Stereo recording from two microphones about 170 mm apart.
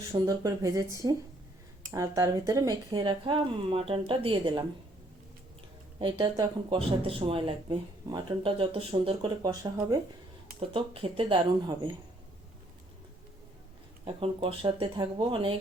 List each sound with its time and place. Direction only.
0.1 s speech: 20° right (ahead or behind)
6.0 s speech: 25° right (ahead or behind)
6.7 s speech: 35° right (ahead or behind)
10.6 s speech: 30° right (ahead or behind)
14.0 s speech: 35° right (ahead or behind)